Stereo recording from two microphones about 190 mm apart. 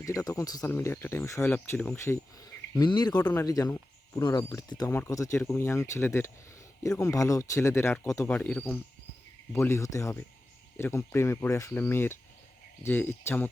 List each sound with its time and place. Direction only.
0.0 s speech: 15° left (ahead or behind)